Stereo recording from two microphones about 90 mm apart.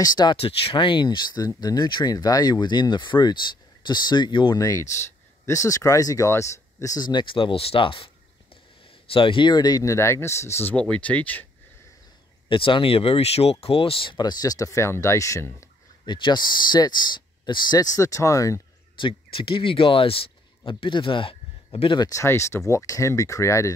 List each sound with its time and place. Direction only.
0.0 s speech: 50° left (ahead or behind)
0.4 s speech: 90° left; by 4.6 s 65° left (ahead or behind)
4.6 s speech: 40° left (ahead or behind)
7.1 s speech: 65° left (ahead or behind); by 9.9 s 45° left (ahead or behind)
9.9 s speech: 30° left (ahead or behind)
12.4 s speech: 75° left (ahead or behind); by 15.7 s 35° left (ahead or behind)
16.1 s speech: 55° left (ahead or behind); by 18.6 s 35° left (ahead or behind)
18.9 s speech: 75° left (ahead or behind)
22.1 s speech: 35° left (ahead or behind)